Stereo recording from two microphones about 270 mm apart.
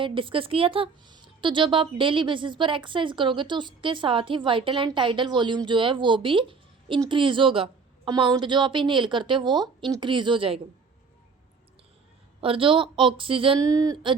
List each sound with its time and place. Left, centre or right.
0.0 s speech: centre
12.4 s a woman's voice: centre